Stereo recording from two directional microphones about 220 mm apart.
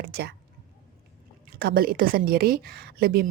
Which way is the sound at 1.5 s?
45° right (ahead or behind).